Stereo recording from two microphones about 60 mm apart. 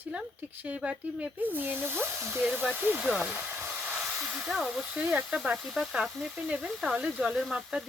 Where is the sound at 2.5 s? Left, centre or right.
Right.